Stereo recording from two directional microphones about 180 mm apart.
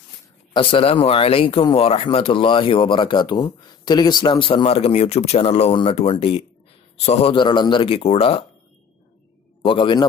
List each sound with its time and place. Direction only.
0.5 s speech: 30° left (ahead or behind)
9.6 s a man's voice: 30° left (ahead or behind)